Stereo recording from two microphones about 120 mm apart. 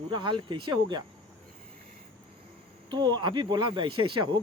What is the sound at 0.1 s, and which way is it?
Speech, 40° right (ahead or behind).